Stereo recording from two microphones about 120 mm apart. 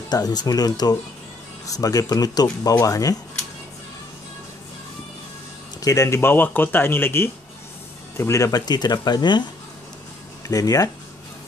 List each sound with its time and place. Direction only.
0.1 s speech: 35° left (ahead or behind)
5.8 s speech: 30° left (ahead or behind)
10.5 s speech: 30° left (ahead or behind)